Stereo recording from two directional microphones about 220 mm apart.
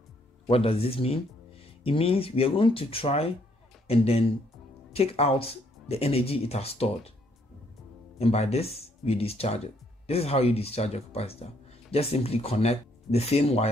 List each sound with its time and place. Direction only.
0.5 s a man's voice: 25° left (ahead or behind)
8.2 s speech: 30° left (ahead or behind)